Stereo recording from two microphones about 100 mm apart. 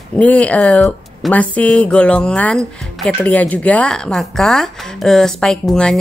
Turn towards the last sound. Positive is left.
turn(degrees=5)  # may be behind; listen again after turning